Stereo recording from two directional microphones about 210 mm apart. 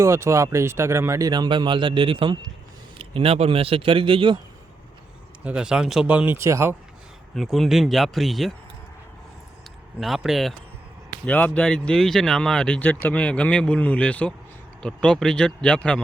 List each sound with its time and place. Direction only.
0.0 s a man's voice: 10° right (ahead or behind)
5.5 s speech: 5° right (ahead or behind)
7.3 s speech: centre (ahead or behind)
10.0 s speech: centre (ahead or behind)